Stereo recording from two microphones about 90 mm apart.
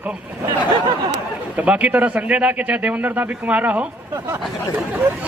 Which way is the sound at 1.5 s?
15° right (ahead or behind).